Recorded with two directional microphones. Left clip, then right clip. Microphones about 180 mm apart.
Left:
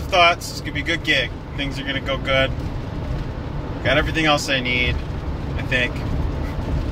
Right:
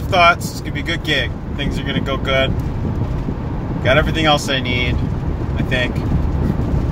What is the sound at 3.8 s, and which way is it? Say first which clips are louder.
Speech: right 4 dB; 15° right (ahead or behind).